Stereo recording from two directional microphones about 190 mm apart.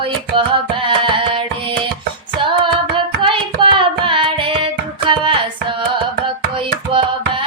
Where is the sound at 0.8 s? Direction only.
25° right (ahead or behind).